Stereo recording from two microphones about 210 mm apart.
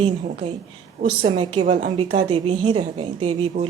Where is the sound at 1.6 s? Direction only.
35° right (ahead or behind).